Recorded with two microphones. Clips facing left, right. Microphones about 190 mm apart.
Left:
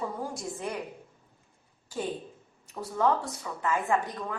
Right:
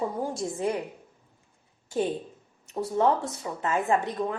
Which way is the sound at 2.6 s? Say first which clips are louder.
Right 3 dB; 25° right (ahead or behind).